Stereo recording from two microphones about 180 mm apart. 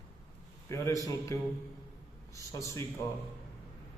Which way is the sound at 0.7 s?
15° left (ahead or behind).